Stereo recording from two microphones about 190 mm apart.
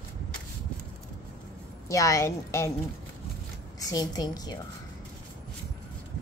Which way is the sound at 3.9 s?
20° left (ahead or behind).